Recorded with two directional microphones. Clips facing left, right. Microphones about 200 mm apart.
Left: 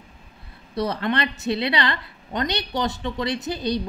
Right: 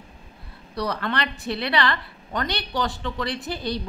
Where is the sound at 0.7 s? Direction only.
25° left (ahead or behind).